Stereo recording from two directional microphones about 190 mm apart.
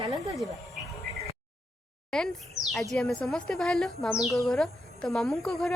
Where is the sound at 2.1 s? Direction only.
5° left (ahead or behind).